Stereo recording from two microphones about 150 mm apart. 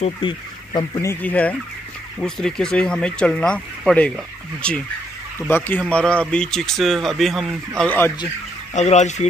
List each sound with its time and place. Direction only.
0.2 s speech: 30° left (ahead or behind)
1.0 s speech: 10° left (ahead or behind)
8.7 s fowl: 50° left (ahead or behind)